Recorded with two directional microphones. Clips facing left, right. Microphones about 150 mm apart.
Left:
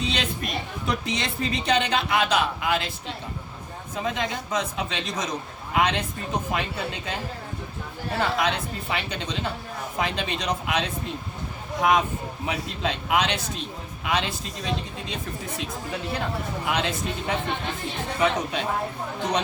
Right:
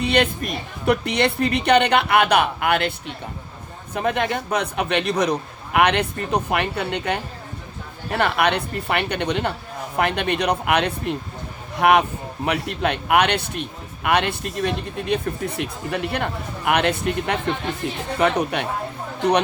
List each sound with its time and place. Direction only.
0.0 s a man's voice: 60° right (ahead or behind)
3.9 s a man's voice: 60° right (ahead or behind)